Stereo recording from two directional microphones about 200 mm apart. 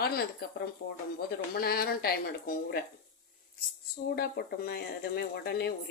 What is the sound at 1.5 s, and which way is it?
A woman's voice, 50° left (ahead or behind).